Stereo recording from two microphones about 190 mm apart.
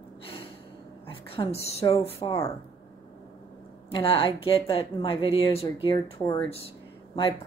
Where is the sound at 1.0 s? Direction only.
30° left (ahead or behind).